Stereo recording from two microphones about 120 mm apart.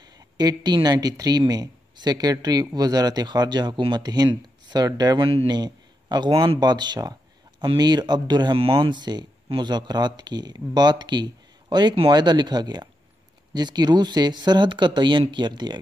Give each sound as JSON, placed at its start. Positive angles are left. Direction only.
{"t": 0.0, "sound": "speech", "side_deg": -35}
{"t": 5.5, "sound": "a man's voice", "side_deg": -35}